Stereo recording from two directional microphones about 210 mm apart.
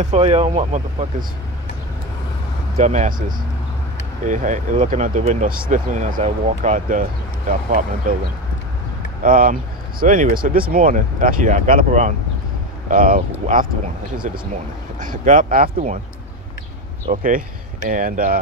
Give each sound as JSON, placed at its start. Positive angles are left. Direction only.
{"t": 0.0, "sound": "speech", "side_deg": -30}
{"t": 2.8, "sound": "speech", "side_deg": -35}
{"t": 9.2, "sound": "speech", "side_deg": -40}
{"t": 17.1, "sound": "speech", "side_deg": -40}